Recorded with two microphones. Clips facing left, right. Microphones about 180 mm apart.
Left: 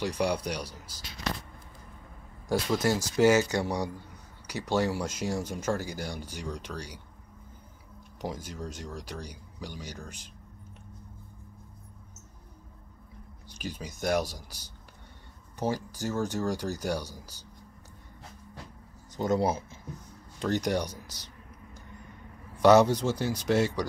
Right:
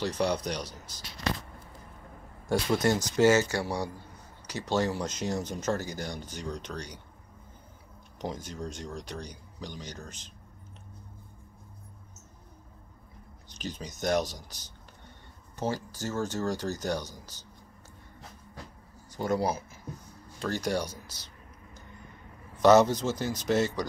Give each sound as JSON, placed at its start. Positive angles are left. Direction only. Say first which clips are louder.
{"t": 0.0, "sound": "speech", "louder": "even", "side_deg": 10}
{"t": 2.5, "sound": "speech", "louder": "right 1 dB", "side_deg": 0}
{"t": 3.2, "sound": "speech", "louder": "left 1 dB", "side_deg": 15}
{"t": 8.2, "sound": "speech", "louder": "even", "side_deg": 5}
{"t": 13.5, "sound": "speech", "louder": "even", "side_deg": 10}
{"t": 19.1, "sound": "speech", "louder": "left 2 dB", "side_deg": 20}
{"t": 22.6, "sound": "speech", "louder": "even", "side_deg": 10}